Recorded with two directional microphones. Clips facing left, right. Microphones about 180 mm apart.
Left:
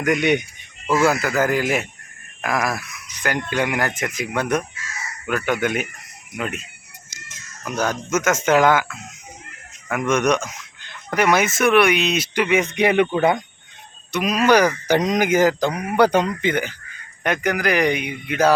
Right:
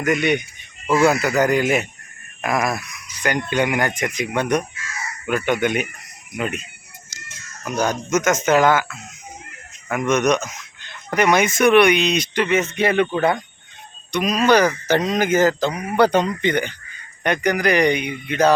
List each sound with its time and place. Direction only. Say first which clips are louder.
0.1 s speech: left 1 dB; 15° left (ahead or behind)
1.0 s speech: right 2 dB; centre (ahead or behind)
7.9 s speech: right 1 dB; 5° left (ahead or behind)
9.9 s speech: right 1 dB; 10° left (ahead or behind)